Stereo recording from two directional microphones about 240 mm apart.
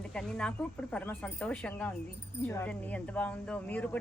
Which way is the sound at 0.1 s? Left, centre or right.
Centre.